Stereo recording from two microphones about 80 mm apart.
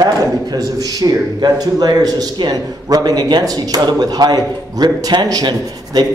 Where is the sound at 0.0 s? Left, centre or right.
Right.